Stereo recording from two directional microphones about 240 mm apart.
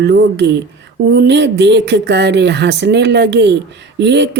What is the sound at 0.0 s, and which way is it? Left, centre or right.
Speech, right.